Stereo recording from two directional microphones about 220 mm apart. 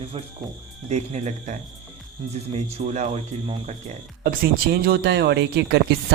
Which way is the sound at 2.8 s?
30° right (ahead or behind).